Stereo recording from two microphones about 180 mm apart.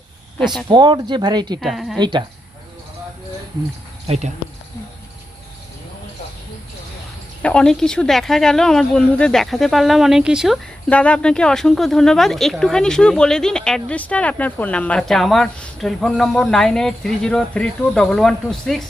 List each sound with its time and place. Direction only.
0.7 s speech: 25° right (ahead or behind)
1.6 s speech: centre (ahead or behind)
2.0 s speech: 25° right (ahead or behind)
4.0 s speech: 35° right (ahead or behind)
7.4 s speech: 5° left (ahead or behind)
10.8 s speech: 5° left (ahead or behind)